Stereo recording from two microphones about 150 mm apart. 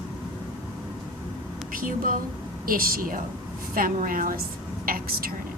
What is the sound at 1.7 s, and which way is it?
A woman's voice, 65° right (ahead or behind).